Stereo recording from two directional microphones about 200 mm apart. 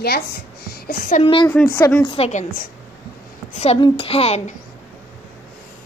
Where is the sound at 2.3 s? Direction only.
40° left (ahead or behind).